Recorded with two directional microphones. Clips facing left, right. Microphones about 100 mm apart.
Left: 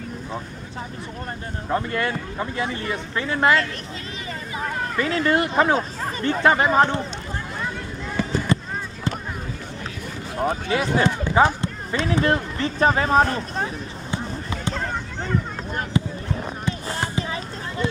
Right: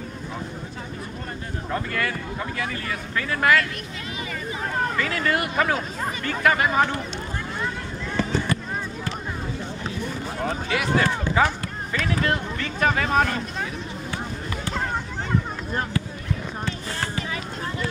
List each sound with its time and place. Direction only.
1.7 s speech: 25° left (ahead or behind)
4.9 s speech: 25° left (ahead or behind)
8.5 s basketball bounce: 25° left (ahead or behind)
10.4 s speech: 30° left (ahead or behind)
14.1 s basketball bounce: 20° left (ahead or behind)
16.0 s basketball bounce: 20° left (ahead or behind)
16.6 s a sound: 20° left (ahead or behind)
17.2 s a sound: 30° left (ahead or behind)